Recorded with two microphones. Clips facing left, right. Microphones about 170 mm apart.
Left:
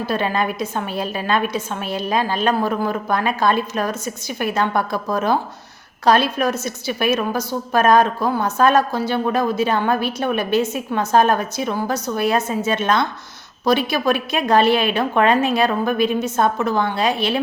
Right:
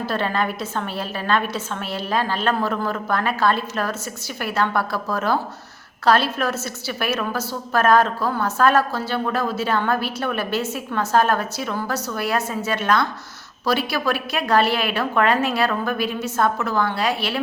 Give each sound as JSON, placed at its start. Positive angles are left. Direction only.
{"t": 0.0, "sound": "a woman's voice", "side_deg": 15}